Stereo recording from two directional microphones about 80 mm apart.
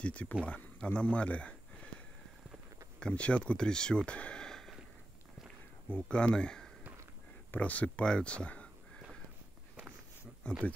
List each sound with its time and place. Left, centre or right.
0.0 s speech: centre
3.0 s speech: centre
5.9 s speech: centre
10.4 s speech: centre